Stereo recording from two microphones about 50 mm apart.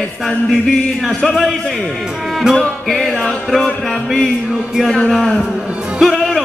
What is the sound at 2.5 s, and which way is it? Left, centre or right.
Music, centre.